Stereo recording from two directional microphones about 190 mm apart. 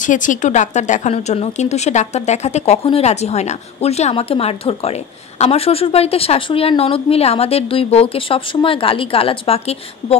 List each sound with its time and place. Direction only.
0.0 s speech: 40° left (ahead or behind)